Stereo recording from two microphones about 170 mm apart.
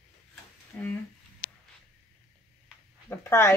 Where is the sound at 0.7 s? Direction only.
10° left (ahead or behind).